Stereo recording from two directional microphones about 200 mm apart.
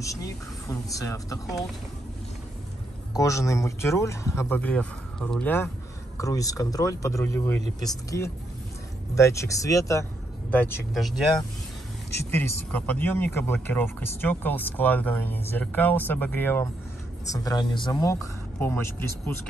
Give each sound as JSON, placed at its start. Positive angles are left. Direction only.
{"t": 0.0, "sound": "speech", "side_deg": 15}
{"t": 3.1, "sound": "speech", "side_deg": 15}
{"t": 10.5, "sound": "speech", "side_deg": 5}
{"t": 12.4, "sound": "speech", "side_deg": 10}